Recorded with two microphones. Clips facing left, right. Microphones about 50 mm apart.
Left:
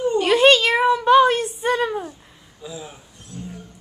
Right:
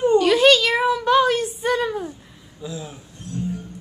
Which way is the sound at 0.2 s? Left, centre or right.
Centre.